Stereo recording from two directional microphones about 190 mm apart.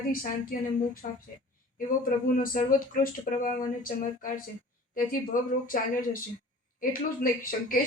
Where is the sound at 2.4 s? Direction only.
45° left (ahead or behind).